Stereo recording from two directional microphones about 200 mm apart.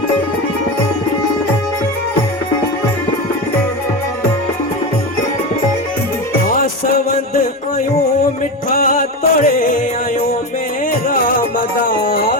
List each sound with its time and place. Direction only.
8.7 s music: 40° left (ahead or behind)
11.1 s music: 45° left (ahead or behind)